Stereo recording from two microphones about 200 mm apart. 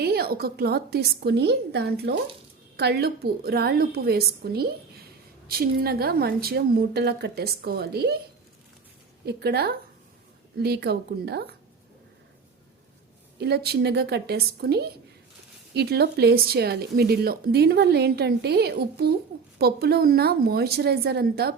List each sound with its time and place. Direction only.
0.0 s speech: 50° right (ahead or behind)
9.2 s speech: 50° right (ahead or behind)
13.4 s speech: 55° right (ahead or behind)